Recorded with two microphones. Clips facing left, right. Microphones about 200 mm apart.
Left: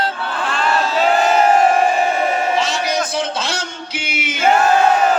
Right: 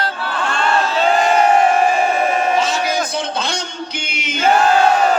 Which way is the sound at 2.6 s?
Centre (ahead or behind).